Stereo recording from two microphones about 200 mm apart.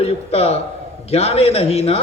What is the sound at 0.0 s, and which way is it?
A man's voice, 30° left (ahead or behind).